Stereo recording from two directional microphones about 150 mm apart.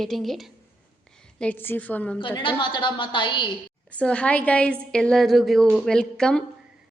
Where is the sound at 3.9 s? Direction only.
10° left (ahead or behind).